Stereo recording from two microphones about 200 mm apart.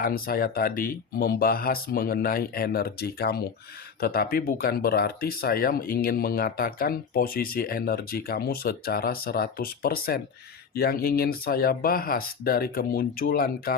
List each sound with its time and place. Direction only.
0.0 s speech: 45° left (ahead or behind)